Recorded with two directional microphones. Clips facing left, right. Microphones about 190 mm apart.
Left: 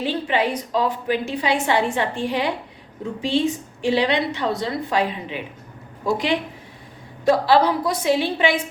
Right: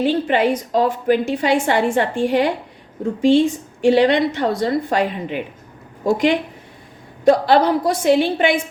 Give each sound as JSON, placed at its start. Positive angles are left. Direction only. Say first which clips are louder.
{"t": 0.0, "sound": "a woman's voice", "louder": "right 5 dB", "side_deg": -50}